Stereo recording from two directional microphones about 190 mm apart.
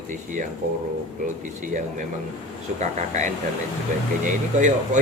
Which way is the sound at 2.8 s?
40° right (ahead or behind).